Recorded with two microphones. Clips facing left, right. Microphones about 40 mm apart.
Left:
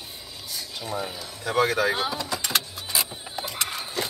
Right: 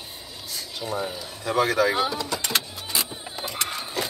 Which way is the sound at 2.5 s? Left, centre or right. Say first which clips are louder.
Even; centre.